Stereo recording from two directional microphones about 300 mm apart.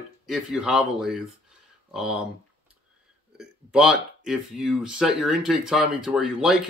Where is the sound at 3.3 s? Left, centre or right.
Centre.